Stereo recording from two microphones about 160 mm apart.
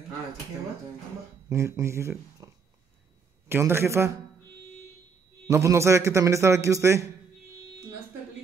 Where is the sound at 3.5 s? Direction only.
15° right (ahead or behind).